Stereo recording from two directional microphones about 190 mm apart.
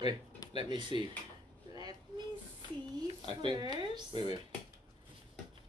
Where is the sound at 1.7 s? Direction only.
20° right (ahead or behind).